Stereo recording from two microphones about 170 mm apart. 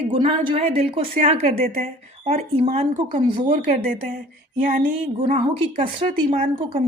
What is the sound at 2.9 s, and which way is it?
A woman's voice, 50° right (ahead or behind).